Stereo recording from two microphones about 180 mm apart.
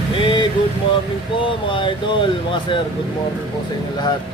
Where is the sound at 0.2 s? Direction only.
30° left (ahead or behind).